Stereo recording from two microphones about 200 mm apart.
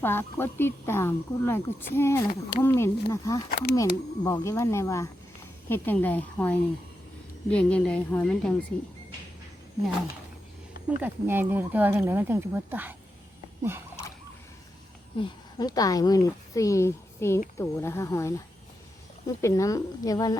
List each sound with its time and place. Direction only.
0.0 s speech: 10° left (ahead or behind)
3.5 s speech: 50° left (ahead or behind)
3.8 s speech: 15° left (ahead or behind)
10.8 s speech: 10° right (ahead or behind)
15.2 s speech: 20° left (ahead or behind)
19.4 s speech: 15° left (ahead or behind)